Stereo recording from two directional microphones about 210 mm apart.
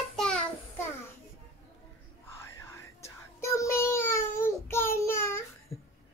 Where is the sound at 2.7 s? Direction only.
15° left (ahead or behind).